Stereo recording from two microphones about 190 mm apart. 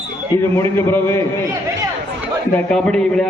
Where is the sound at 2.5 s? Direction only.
5° left (ahead or behind).